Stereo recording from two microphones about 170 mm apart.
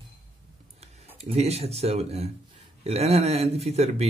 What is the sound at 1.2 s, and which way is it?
Speech, 35° right (ahead or behind).